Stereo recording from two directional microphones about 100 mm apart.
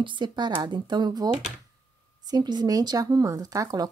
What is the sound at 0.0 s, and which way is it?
A woman's voice, 50° right (ahead or behind).